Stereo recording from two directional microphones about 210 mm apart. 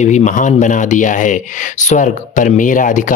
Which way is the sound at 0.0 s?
35° left (ahead or behind).